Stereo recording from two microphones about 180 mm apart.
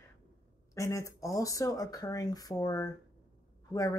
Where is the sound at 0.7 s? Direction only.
15° left (ahead or behind).